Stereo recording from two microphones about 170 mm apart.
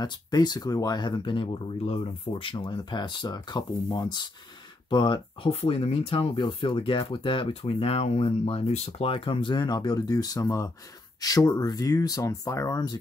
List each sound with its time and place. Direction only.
0.0 s speech: 25° left (ahead or behind)